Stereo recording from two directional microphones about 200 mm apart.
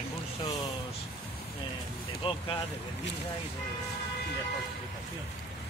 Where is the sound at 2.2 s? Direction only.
30° left (ahead or behind).